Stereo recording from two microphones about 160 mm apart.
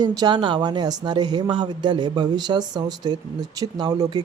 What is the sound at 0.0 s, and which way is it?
Speech, 25° right (ahead or behind).